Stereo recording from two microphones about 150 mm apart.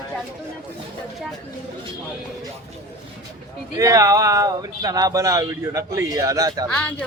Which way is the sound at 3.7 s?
20° right (ahead or behind).